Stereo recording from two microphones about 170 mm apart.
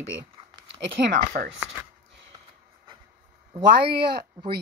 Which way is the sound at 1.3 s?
55° right (ahead or behind).